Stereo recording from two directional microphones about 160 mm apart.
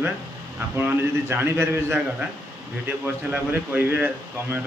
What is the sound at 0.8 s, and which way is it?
Speech, 15° right (ahead or behind).